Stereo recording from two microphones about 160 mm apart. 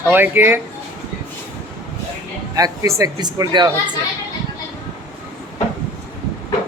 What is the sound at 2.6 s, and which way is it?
Speech, 20° right (ahead or behind).